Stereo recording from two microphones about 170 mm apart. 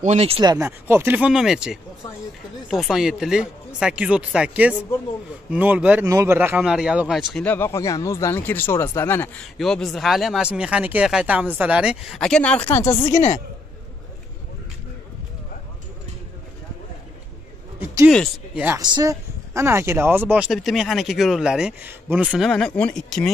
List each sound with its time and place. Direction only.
0.0 s speech: 40° right (ahead or behind)
0.4 s speech: 20° right (ahead or behind); by 7.4 s centre (ahead or behind)
7.4 s speech: 15° left (ahead or behind)
17.7 s a sound: 10° right (ahead or behind)
18.1 s speech: 5° left (ahead or behind)
18.8 s speech: 25° right (ahead or behind); by 23.3 s 5° left (ahead or behind)